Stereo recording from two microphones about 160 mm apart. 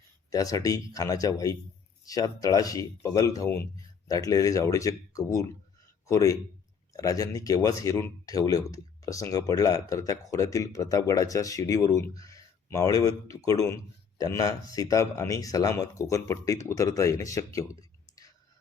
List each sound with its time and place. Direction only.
0.3 s speech: 20° left (ahead or behind)